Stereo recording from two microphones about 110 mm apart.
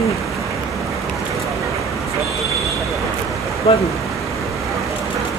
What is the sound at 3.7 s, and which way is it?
Speech, 60° left (ahead or behind).